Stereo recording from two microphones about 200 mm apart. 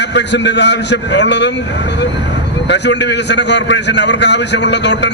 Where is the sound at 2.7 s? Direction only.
60° left (ahead or behind).